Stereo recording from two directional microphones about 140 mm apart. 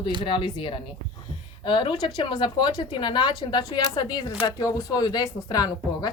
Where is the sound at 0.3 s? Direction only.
35° left (ahead or behind).